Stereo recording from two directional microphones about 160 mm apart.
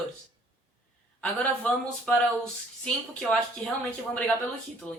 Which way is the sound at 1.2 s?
10° left (ahead or behind).